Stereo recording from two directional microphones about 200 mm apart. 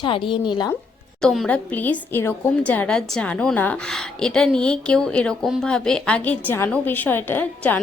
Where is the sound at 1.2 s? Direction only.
Centre (ahead or behind).